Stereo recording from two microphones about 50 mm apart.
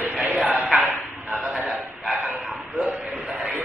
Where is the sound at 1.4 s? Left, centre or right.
Centre.